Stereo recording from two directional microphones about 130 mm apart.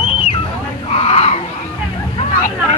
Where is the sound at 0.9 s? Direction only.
50° left (ahead or behind).